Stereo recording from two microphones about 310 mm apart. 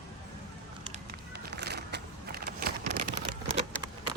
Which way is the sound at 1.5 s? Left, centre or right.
Right.